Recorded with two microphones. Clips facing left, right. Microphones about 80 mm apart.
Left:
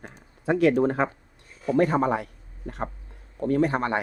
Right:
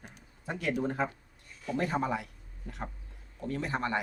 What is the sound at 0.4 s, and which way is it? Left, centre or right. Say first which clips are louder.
Speech: left 12 dB; left.